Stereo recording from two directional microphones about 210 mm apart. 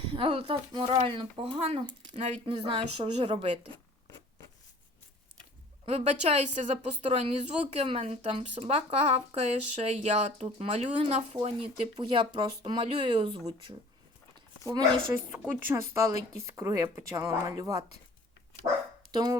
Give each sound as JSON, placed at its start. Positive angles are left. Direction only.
{"t": 0.1, "sound": "a woman's voice", "side_deg": -25}
{"t": 5.8, "sound": "a woman's voice", "side_deg": -30}
{"t": 19.1, "sound": "a woman's voice", "side_deg": -20}